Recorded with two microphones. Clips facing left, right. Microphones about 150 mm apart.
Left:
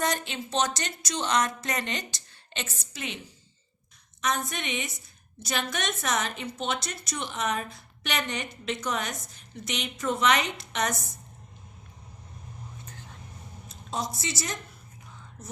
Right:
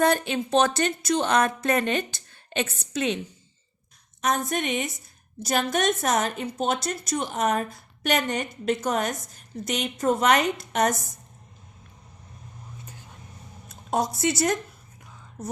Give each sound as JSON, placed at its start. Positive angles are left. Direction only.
{"t": 0.0, "sound": "a woman's voice", "side_deg": -55}
{"t": 2.9, "sound": "a woman's voice", "side_deg": -65}
{"t": 4.2, "sound": "a woman's voice", "side_deg": -45}
{"t": 12.8, "sound": "vehicle", "side_deg": -10}
{"t": 13.7, "sound": "speech", "side_deg": -60}